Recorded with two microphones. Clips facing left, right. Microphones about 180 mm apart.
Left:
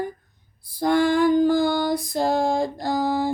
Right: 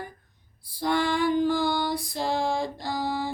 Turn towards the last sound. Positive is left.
turn(degrees=45)  # may be behind; listen again after turning